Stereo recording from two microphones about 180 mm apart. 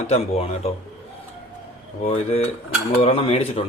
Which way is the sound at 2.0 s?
35° left (ahead or behind).